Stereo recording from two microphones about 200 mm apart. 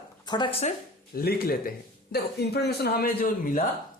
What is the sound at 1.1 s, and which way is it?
Speech, 50° left (ahead or behind).